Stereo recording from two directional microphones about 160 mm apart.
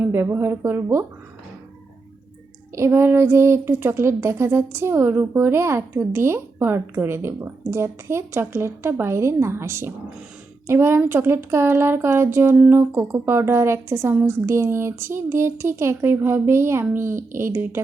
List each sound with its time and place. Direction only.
0.0 s speech: 15° right (ahead or behind)
2.7 s speech: 15° right (ahead or behind)